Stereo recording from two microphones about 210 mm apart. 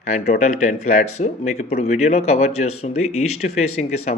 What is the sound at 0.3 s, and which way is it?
Speech, 35° left (ahead or behind).